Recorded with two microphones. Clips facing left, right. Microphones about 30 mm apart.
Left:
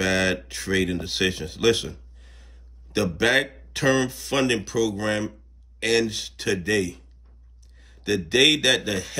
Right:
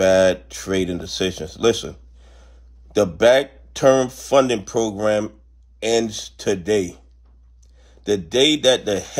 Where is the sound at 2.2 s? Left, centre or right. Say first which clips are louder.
Right 2 dB; left.